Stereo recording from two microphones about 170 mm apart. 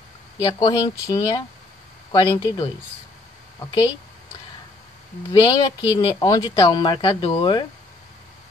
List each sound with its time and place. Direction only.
0.5 s speech: 30° left (ahead or behind)
5.3 s speech: 25° left (ahead or behind)